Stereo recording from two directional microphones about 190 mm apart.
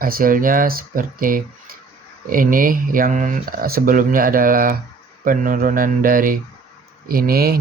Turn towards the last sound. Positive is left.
turn(degrees=-50)  # may be behind; listen again after turning